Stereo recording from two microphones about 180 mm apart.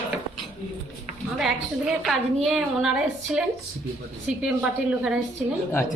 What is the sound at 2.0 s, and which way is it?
A man's voice, centre (ahead or behind).